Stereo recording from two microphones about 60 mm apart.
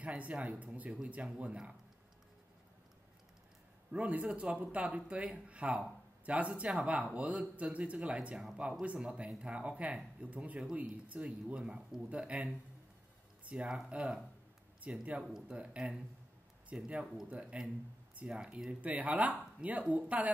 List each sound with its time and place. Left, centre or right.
0.0 s speech: right
3.9 s speech: centre
13.5 s speech: right